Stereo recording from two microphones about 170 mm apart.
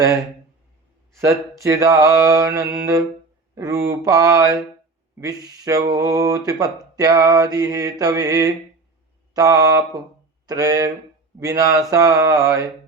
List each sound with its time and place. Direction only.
1.6 s speech: 20° right (ahead or behind)